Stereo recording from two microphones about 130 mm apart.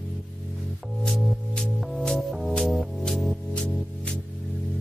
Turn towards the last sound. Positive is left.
turn(degrees=5)  # may be behind; listen again after turning